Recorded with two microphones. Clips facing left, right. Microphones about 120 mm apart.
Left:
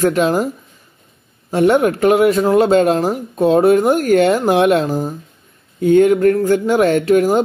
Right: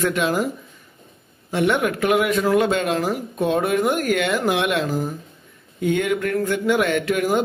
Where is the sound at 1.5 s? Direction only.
40° left (ahead or behind).